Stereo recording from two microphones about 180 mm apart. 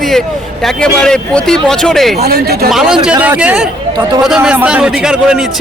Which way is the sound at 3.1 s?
10° right (ahead or behind).